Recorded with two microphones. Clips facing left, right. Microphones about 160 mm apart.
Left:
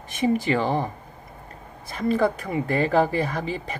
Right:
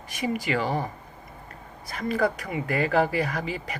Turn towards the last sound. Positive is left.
turn(degrees=30)  # may be behind; listen again after turning